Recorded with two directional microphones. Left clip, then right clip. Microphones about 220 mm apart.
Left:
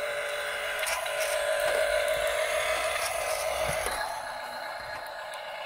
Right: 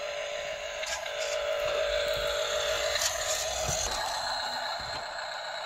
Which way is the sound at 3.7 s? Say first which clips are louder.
Even; 45° right (ahead or behind).